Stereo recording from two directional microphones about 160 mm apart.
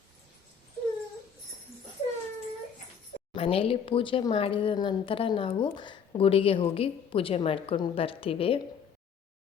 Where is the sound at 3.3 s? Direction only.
35° left (ahead or behind).